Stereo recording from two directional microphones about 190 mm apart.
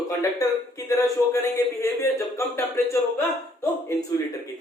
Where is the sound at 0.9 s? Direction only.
15° left (ahead or behind).